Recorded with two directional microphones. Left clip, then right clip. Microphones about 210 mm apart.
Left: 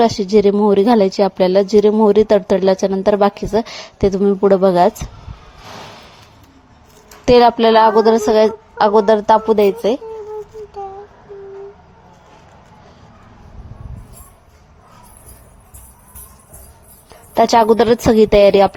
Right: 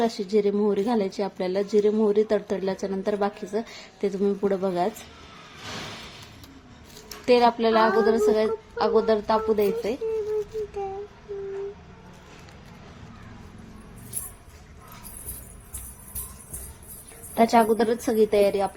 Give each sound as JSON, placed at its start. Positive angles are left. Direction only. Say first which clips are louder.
{"t": 0.0, "sound": "a woman's voice", "louder": "left 11 dB", "side_deg": 35}
{"t": 7.3, "sound": "a woman's voice", "louder": "left 10 dB", "side_deg": 40}
{"t": 17.3, "sound": "a woman's voice", "louder": "left 9 dB", "side_deg": 35}